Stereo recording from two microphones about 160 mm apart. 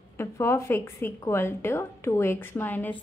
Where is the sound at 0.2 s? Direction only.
15° left (ahead or behind).